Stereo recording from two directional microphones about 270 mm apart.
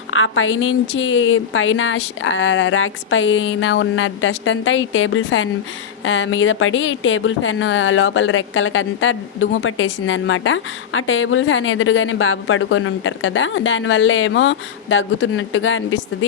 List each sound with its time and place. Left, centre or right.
0.1 s a woman's voice: left